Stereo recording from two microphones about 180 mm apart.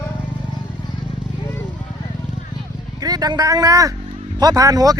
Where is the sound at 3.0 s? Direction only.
20° right (ahead or behind).